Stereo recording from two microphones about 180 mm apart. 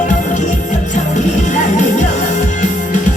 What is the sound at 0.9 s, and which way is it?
Music, 45° left (ahead or behind).